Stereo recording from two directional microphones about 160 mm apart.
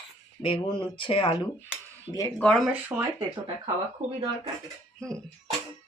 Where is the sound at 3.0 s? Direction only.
20° right (ahead or behind).